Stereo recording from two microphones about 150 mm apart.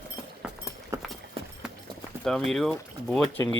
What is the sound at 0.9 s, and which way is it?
Clip-clop, 20° right (ahead or behind).